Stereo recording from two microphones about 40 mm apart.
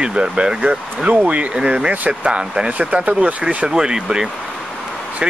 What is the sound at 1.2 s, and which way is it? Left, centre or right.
Speech, right.